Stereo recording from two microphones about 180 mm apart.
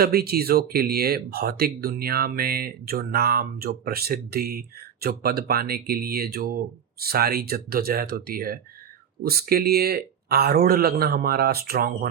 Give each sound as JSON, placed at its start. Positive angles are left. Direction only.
{"t": 0.0, "sound": "speech", "side_deg": -60}